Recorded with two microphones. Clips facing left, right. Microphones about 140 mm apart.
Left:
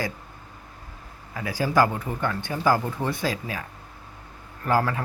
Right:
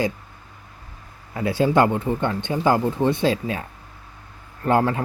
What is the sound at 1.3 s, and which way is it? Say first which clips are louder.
A man's voice: right 6 dB; 25° right (ahead or behind).